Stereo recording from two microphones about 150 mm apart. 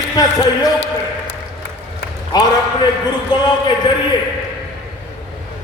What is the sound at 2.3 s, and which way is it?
A man's voice, 25° left (ahead or behind).